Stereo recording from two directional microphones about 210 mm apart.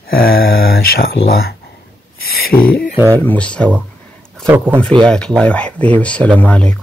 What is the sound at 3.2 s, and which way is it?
Speech, 5° left (ahead or behind).